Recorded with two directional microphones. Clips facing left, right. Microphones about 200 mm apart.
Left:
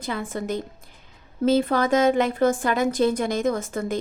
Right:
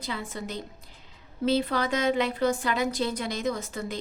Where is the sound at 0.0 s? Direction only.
50° left (ahead or behind).